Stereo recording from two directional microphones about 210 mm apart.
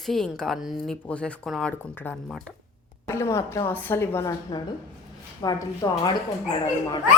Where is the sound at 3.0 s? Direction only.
15° left (ahead or behind).